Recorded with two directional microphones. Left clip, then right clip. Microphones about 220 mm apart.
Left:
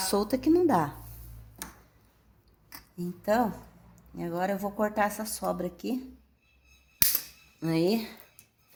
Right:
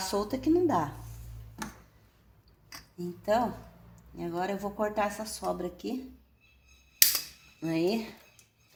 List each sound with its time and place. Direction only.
0.0 s a woman's voice: 45° left (ahead or behind)
3.0 s a woman's voice: 40° left (ahead or behind)
7.6 s a woman's voice: 45° left (ahead or behind)